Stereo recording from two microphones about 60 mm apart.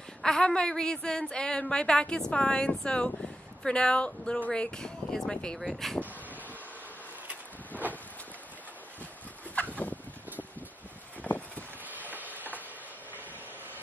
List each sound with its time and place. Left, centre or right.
0.2 s a woman's voice: centre
5.6 s speech: centre
9.6 s fowl: left
11.2 s a sound: left
11.8 s vehicle: right